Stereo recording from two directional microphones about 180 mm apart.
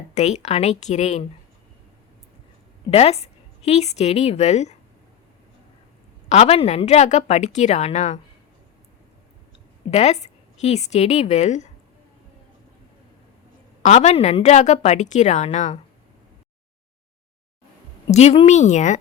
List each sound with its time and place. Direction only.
0.1 s a woman's voice: 40° left (ahead or behind)
2.9 s a woman's voice: 35° left (ahead or behind)
6.2 s a woman's voice: 35° left (ahead or behind)
9.9 s a woman's voice: 40° left (ahead or behind)
13.8 s a woman's voice: 40° left (ahead or behind)
18.1 s a woman's voice: 40° left (ahead or behind)